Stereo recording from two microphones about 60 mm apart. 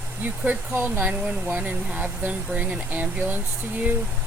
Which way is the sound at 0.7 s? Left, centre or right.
Right.